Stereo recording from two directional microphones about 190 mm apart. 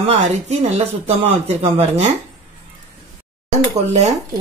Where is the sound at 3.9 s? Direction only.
35° right (ahead or behind).